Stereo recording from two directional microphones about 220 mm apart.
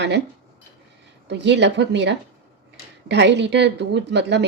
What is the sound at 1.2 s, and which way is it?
Speech, 50° right (ahead or behind).